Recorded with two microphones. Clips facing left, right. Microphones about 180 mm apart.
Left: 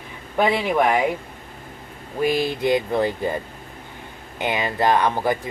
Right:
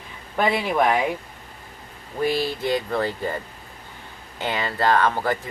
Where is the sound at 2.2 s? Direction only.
15° left (ahead or behind).